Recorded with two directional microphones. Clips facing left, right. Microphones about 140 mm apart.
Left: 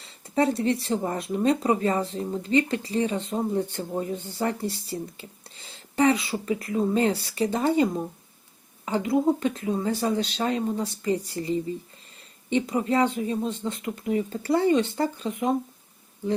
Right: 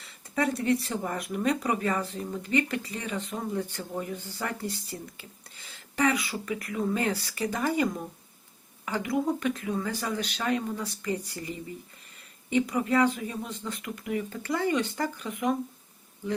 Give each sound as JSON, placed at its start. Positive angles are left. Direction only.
{"t": 0.0, "sound": "speech", "side_deg": 30}